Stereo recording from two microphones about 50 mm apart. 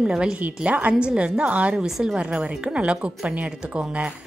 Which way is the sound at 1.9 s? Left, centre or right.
Centre.